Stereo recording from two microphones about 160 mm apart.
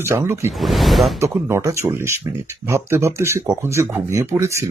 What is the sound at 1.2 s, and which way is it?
Speech, 15° right (ahead or behind).